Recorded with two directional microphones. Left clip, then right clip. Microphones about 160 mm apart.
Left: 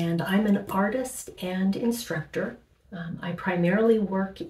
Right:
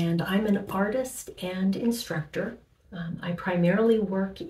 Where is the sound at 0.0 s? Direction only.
20° left (ahead or behind).